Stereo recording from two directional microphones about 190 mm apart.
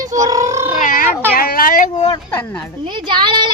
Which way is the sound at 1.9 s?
20° left (ahead or behind).